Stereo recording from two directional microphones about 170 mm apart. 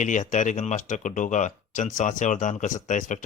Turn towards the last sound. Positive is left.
turn(degrees=45)  # may be behind; listen again after turning